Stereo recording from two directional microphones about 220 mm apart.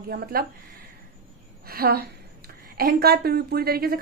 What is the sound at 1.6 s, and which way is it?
A woman's voice, 45° right (ahead or behind).